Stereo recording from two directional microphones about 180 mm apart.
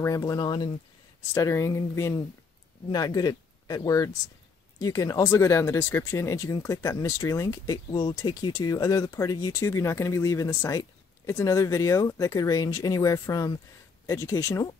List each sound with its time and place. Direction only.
0.0 s speech: 20° left (ahead or behind)